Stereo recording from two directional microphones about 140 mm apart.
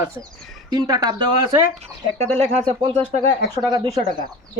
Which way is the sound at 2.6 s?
40° right (ahead or behind).